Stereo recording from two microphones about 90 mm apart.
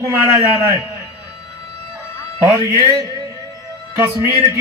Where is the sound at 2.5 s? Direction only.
35° right (ahead or behind).